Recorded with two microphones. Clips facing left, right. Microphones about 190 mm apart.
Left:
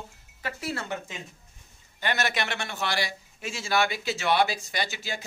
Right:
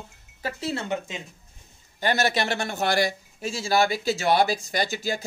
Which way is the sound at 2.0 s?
35° right (ahead or behind).